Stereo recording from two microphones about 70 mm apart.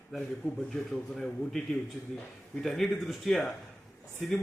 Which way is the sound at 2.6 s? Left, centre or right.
Centre.